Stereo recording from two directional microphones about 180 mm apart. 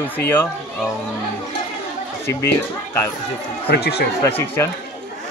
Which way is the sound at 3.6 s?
65° left (ahead or behind).